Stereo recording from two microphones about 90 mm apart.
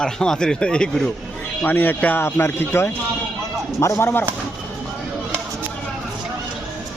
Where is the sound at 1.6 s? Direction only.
20° left (ahead or behind).